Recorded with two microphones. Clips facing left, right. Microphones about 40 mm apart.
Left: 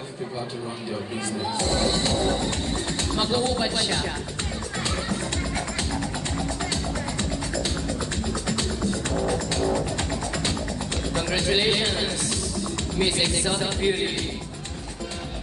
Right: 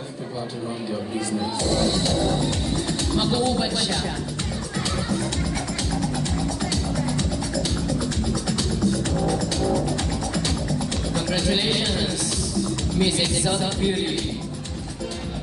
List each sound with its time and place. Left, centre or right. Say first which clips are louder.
1.6 s speech: right 1 dB; left
3.5 s speech: right 1 dB; left
8.5 s music: right 3 dB; left
11.1 s music: even; left
13.0 s speech: right 1 dB; left